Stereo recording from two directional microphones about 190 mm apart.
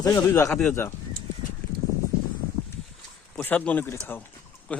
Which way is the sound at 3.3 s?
5° left (ahead or behind).